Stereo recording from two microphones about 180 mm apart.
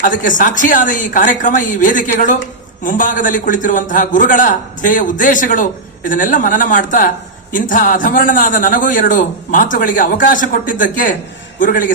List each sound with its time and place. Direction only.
0.0 s a man's voice: 45° left (ahead or behind)